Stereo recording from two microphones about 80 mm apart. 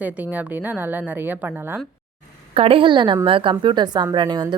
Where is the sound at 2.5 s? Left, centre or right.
Right.